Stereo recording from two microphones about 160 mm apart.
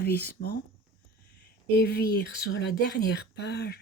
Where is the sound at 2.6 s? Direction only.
90° left.